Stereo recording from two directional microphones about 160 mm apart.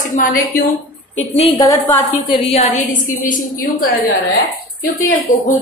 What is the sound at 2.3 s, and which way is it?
A woman's voice, 40° left (ahead or behind).